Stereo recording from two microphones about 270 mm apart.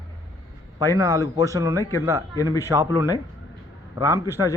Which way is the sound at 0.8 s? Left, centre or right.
Centre.